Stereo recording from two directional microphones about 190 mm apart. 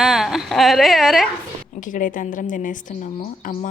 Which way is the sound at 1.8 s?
45° left (ahead or behind).